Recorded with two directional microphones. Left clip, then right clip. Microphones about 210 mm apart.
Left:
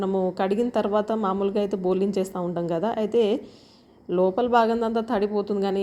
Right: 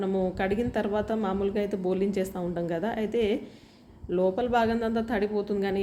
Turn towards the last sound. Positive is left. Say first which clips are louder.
# left 3 dB
turn(degrees=25)  # may be behind; listen again after turning